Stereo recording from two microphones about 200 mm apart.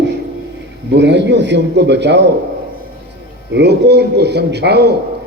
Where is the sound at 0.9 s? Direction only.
60° right (ahead or behind).